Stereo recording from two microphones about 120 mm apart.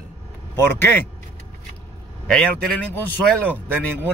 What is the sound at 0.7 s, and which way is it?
Speech, 15° left (ahead or behind).